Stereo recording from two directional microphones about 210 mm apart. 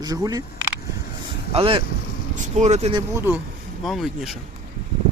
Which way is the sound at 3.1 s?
10° right (ahead or behind).